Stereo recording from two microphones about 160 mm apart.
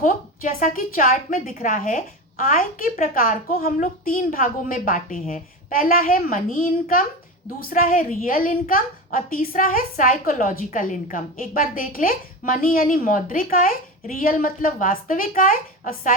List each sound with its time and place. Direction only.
0.0 s a woman's voice: 55° left (ahead or behind)